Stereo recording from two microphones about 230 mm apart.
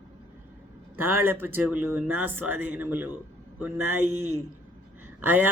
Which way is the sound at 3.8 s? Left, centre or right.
Right.